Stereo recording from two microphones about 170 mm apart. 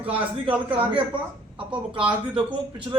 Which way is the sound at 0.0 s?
30° right (ahead or behind).